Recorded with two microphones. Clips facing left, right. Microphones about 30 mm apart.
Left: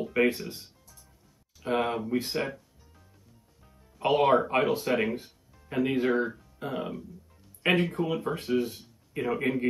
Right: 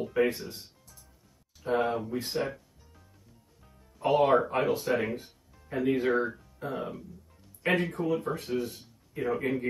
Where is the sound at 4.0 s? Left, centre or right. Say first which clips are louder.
Left 1 dB; left.